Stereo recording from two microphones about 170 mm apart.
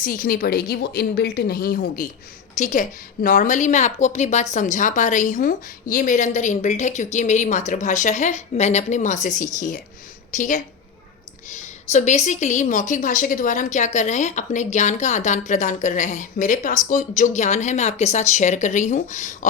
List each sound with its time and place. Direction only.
0.0 s a woman's voice: 55° left (ahead or behind)
2.6 s a woman's voice: 45° left (ahead or behind)